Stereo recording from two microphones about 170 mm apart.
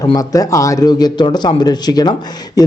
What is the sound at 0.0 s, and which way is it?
Speech, 20° left (ahead or behind).